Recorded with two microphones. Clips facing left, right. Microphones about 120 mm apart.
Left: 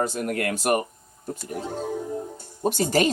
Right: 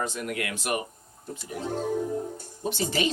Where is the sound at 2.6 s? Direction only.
45° left (ahead or behind).